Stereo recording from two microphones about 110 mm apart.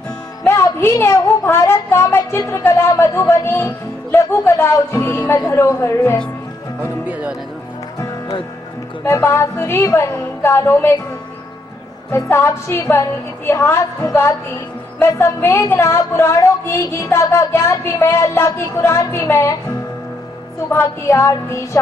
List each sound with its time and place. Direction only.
0.5 s speech: 25° left (ahead or behind)
7.1 s speech: 10° right (ahead or behind)
9.0 s speech: 25° left (ahead or behind)
12.1 s speech: 25° left (ahead or behind)
20.7 s speech: 25° left (ahead or behind)